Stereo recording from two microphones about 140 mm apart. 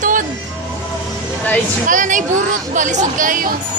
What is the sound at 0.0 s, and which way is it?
Music, 70° right (ahead or behind).